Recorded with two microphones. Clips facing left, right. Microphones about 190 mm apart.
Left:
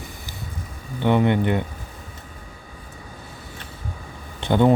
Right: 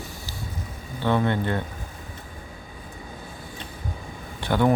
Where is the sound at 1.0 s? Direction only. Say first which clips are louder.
Left 4 dB; 15° left (ahead or behind).